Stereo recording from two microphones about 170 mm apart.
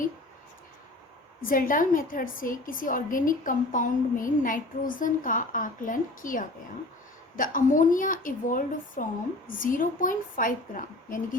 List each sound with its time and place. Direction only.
1.4 s a woman's voice: 55° left (ahead or behind)